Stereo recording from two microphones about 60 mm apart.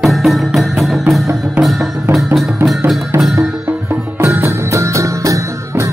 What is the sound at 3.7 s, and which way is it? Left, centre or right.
Music, right.